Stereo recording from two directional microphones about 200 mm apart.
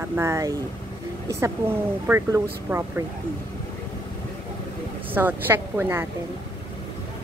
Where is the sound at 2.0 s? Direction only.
10° right (ahead or behind).